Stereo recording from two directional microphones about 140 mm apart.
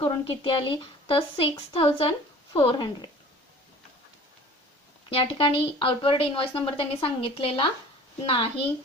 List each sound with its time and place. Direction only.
0.0 s speech: 40° left (ahead or behind)
5.0 s speech: 35° left (ahead or behind)